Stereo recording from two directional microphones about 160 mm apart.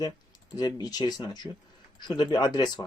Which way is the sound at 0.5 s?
25° left (ahead or behind).